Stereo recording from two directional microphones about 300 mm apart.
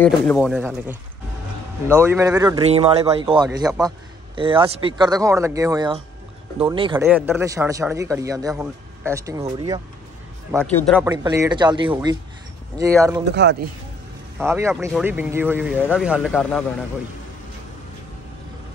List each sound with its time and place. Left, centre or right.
0.0 s a man's voice: centre
10.6 s speech: centre
11.1 s a man's voice: centre
13.3 s a man's voice: right
14.4 s a man's voice: centre